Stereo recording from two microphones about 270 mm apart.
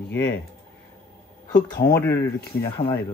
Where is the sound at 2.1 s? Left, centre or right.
Left.